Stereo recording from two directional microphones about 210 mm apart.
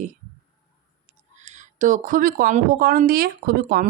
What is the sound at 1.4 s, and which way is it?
Speech, 35° right (ahead or behind).